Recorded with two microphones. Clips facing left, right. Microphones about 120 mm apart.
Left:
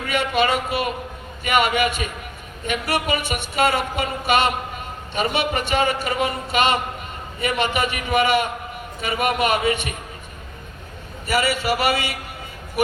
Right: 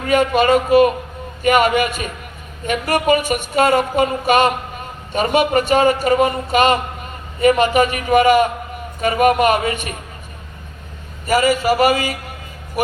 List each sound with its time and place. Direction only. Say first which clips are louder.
0.0 s a man's voice: right 6 dB; 40° right (ahead or behind)
11.3 s speech: right 6 dB; 40° right (ahead or behind)